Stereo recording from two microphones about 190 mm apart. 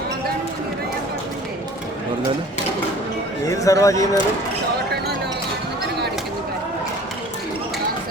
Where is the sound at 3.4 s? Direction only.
15° left (ahead or behind).